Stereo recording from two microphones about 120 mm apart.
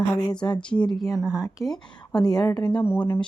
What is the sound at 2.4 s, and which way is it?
Speech, 35° left (ahead or behind).